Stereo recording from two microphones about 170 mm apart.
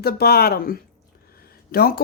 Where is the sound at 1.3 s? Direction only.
65° left (ahead or behind).